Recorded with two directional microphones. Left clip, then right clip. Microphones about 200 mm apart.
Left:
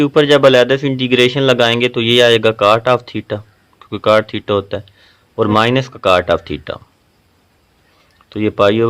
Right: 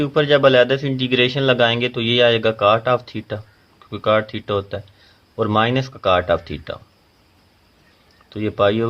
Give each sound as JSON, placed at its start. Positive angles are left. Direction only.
{"t": 0.0, "sound": "a man's voice", "side_deg": 40}
{"t": 8.3, "sound": "a man's voice", "side_deg": 40}